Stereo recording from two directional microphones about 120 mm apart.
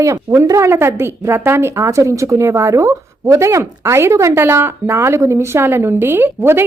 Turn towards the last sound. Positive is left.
turn(degrees=-20)  # may be behind; listen again after turning